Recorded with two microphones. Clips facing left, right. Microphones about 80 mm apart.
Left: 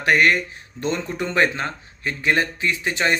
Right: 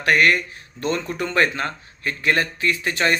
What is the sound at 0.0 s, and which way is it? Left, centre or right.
Speech, left.